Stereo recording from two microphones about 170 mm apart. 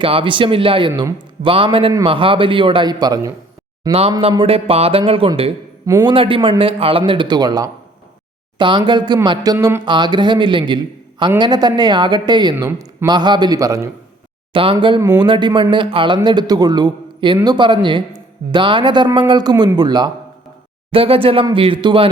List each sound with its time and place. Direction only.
0.0 s a man's voice: 30° right (ahead or behind)
5.8 s a man's voice: 15° right (ahead or behind)
6.1 s a man's voice: 30° right (ahead or behind)
14.5 s a man's voice: 30° right (ahead or behind)